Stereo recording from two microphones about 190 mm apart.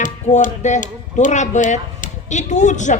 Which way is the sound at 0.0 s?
40° left (ahead or behind).